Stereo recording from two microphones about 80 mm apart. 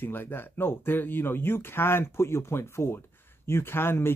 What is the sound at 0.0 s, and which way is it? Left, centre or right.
Speech, left.